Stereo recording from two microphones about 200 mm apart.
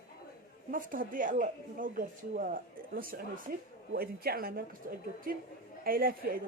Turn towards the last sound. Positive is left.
turn(degrees=-45)  # may be behind; listen again after turning